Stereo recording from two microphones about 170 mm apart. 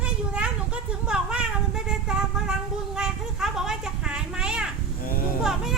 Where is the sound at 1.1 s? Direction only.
5° right (ahead or behind).